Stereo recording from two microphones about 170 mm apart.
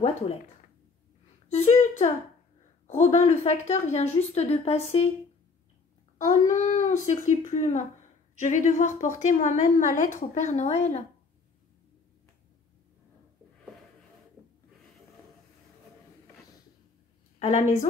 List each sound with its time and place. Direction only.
1.5 s a woman's voice: 40° left (ahead or behind)
6.1 s a woman's voice: 45° left (ahead or behind)
17.4 s a woman's voice: 45° left (ahead or behind)